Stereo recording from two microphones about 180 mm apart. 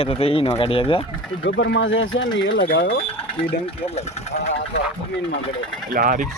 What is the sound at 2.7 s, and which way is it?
Speech, 75° left (ahead or behind).